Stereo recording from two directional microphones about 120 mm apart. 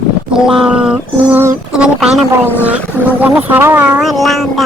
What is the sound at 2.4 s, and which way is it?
Speech, 15° left (ahead or behind).